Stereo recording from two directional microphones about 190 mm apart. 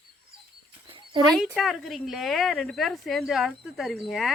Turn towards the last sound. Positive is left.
turn(degrees=0)  # may be behind; listen again after turning